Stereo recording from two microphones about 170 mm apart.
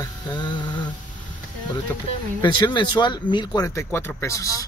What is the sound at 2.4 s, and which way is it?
Speech, 30° left (ahead or behind).